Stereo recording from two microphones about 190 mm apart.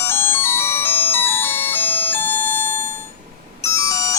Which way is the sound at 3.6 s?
15° left (ahead or behind).